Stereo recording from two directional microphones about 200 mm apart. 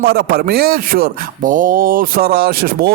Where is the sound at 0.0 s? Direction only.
50° right (ahead or behind).